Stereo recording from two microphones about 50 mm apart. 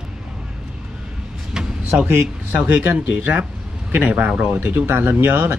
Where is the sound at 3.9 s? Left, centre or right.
Right.